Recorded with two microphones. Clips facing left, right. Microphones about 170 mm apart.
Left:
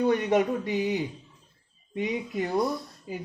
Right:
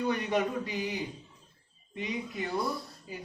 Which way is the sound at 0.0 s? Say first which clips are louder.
Left 6 dB; 45° left (ahead or behind).